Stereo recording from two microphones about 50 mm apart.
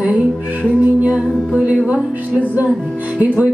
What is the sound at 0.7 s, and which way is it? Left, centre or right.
Music, right.